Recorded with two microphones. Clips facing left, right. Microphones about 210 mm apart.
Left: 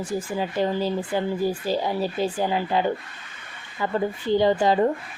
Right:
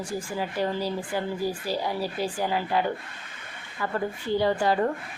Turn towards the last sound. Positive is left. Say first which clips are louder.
# left 4 dB
turn(degrees=20)  # may be behind; listen again after turning